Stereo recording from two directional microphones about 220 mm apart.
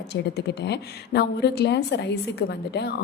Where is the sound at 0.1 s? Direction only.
50° left (ahead or behind).